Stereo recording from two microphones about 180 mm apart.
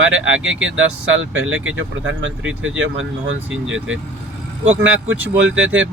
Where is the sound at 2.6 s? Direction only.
90° right.